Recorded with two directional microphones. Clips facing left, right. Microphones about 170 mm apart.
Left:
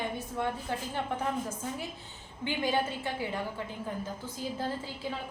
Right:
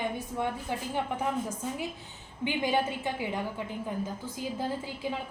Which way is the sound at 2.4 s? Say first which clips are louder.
Right 2 dB; 15° right (ahead or behind).